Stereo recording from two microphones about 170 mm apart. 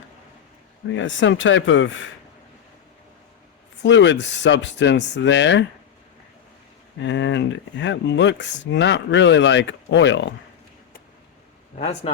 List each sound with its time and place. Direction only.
0.9 s speech: 90° left
3.8 s speech: 90° left
7.0 s speech: 90° left
11.8 s speech: 40° left (ahead or behind)